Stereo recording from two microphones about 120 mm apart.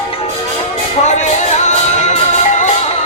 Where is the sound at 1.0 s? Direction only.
75° left (ahead or behind).